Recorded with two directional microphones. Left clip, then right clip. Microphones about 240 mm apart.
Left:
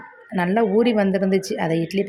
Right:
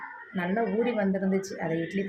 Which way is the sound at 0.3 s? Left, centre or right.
Left.